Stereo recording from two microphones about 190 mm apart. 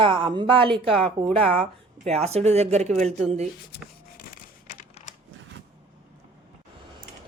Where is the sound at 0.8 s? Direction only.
5° left (ahead or behind).